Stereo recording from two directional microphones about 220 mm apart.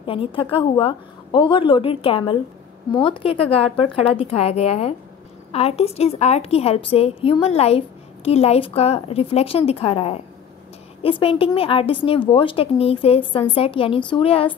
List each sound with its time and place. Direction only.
0.0 s a woman's voice: 25° left (ahead or behind)